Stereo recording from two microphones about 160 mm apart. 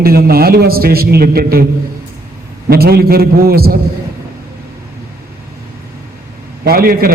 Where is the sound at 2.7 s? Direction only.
75° right (ahead or behind).